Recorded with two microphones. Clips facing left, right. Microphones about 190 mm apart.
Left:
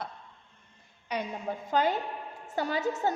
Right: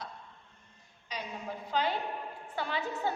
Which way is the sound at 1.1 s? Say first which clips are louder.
Left 6 dB; 50° left (ahead or behind).